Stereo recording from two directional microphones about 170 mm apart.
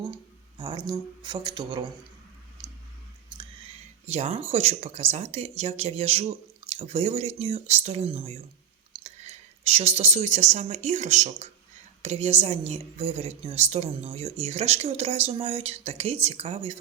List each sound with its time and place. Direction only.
0.6 s speech: 25° right (ahead or behind)
4.0 s speech: 40° right (ahead or behind)